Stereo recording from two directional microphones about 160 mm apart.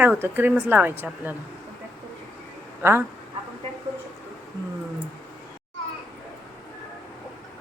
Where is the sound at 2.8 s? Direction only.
15° right (ahead or behind).